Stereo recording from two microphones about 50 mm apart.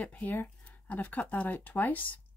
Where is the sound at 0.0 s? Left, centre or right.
Left.